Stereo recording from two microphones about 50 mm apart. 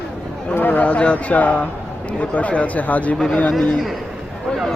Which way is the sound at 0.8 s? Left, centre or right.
Left.